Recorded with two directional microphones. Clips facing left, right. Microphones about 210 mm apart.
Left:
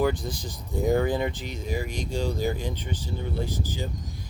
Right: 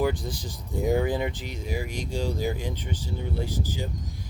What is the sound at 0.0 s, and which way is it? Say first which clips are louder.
Speech: left 1 dB; 10° right (ahead or behind).